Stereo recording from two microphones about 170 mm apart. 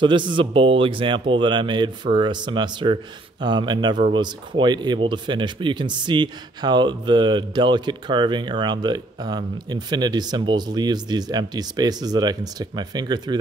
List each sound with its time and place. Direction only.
0.0 s speech: 30° right (ahead or behind)